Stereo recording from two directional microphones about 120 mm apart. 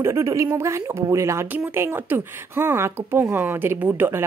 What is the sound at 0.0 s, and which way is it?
Speech, 25° right (ahead or behind).